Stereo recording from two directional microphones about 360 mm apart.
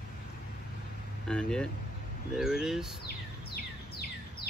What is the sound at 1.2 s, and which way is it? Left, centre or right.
Speech, centre.